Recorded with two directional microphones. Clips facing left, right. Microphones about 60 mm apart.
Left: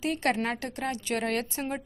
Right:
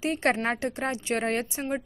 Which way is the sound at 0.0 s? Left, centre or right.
Right.